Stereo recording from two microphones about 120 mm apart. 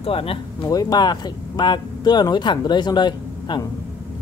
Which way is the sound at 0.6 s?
30° left (ahead or behind).